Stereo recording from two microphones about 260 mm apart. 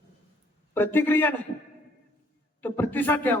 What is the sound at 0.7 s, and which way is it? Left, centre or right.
Speech, centre.